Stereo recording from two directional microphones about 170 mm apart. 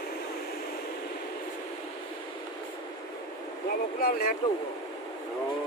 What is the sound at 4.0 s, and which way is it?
Speech, 55° left (ahead or behind).